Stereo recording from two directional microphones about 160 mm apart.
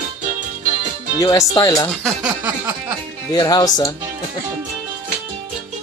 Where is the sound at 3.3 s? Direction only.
25° left (ahead or behind).